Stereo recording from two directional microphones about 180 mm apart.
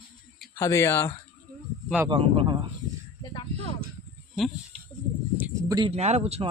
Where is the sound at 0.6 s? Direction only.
15° left (ahead or behind).